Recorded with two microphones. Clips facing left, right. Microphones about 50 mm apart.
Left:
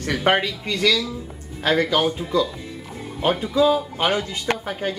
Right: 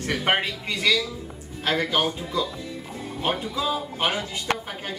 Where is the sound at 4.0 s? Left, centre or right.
Left.